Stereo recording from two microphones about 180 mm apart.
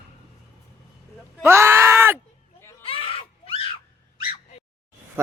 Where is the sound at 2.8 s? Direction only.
30° left (ahead or behind).